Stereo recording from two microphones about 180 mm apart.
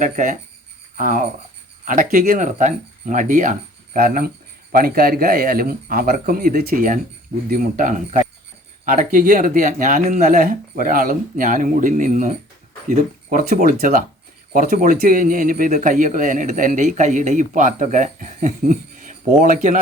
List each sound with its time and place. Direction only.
0.0 s speech: 45° right (ahead or behind)